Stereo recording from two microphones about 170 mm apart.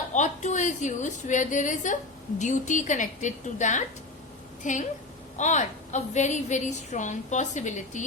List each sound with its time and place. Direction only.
0.1 s a woman's voice: 45° left (ahead or behind)